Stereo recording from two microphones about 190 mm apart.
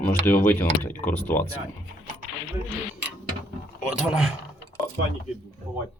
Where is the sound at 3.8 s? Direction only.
5° right (ahead or behind).